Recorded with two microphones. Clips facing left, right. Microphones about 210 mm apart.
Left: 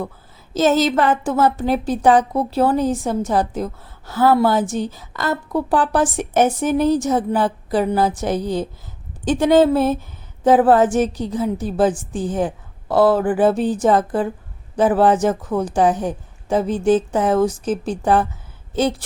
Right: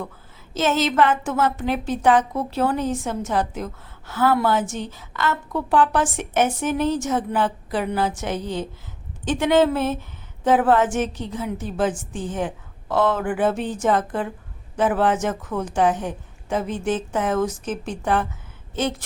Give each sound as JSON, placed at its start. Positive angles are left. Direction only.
{"t": 0.5, "sound": "a woman's voice", "side_deg": 35}